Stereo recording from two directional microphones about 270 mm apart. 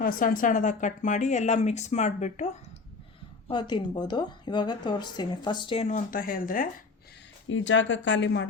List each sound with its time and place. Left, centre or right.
0.0 s speech: left
7.4 s speech: left